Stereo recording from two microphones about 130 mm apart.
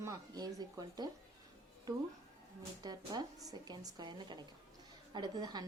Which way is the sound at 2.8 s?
30° right (ahead or behind).